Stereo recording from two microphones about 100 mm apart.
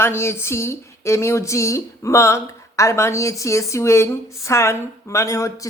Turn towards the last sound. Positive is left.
turn(degrees=30)  # may be behind; listen again after turning